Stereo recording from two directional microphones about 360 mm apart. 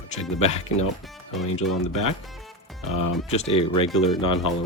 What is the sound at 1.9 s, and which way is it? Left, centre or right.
Speech, left.